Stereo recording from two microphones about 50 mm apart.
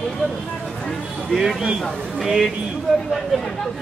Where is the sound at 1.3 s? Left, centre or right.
Centre.